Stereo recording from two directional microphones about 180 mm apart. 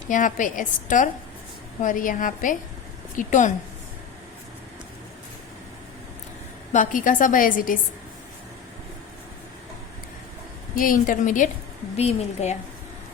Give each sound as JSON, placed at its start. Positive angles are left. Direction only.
{"t": 0.1, "sound": "a woman's voice", "side_deg": 45}
{"t": 6.7, "sound": "a woman's voice", "side_deg": 45}
{"t": 10.8, "sound": "a woman's voice", "side_deg": 50}